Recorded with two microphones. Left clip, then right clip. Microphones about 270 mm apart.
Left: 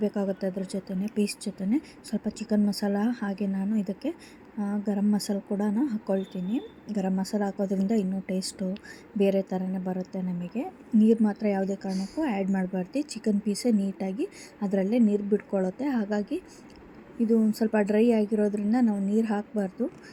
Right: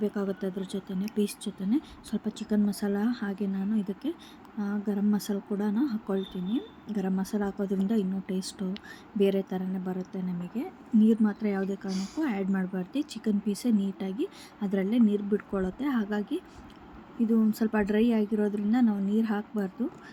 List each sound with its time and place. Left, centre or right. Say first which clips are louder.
0.0 s speech: left 3 dB; centre
11.9 s speech: left 2 dB; right
12.2 s speech: left 2 dB; centre
14.8 s speech: even; right
15.1 s speech: left 3 dB; centre
17.2 s speech: left 3 dB; centre